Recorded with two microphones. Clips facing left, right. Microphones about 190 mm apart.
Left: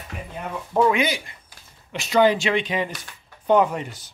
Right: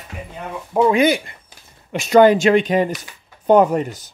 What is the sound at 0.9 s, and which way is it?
Speech, 45° right (ahead or behind).